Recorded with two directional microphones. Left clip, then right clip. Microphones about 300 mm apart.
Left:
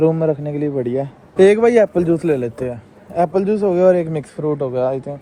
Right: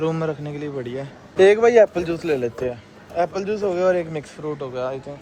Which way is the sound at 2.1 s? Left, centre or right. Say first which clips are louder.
Left 6 dB; left.